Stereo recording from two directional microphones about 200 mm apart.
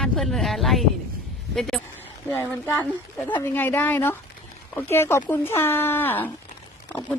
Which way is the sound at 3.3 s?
25° left (ahead or behind).